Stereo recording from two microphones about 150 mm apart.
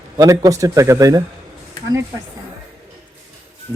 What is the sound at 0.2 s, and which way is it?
A man's voice, 20° right (ahead or behind).